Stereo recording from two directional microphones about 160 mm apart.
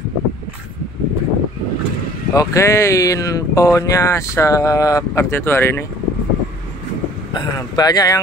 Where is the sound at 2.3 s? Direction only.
20° left (ahead or behind).